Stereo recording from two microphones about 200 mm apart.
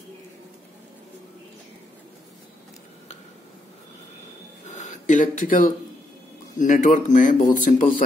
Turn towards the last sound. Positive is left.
turn(degrees=40)  # may be behind; listen again after turning